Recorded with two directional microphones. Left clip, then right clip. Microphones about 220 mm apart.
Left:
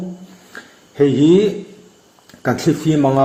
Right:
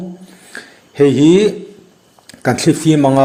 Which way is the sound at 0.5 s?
35° right (ahead or behind).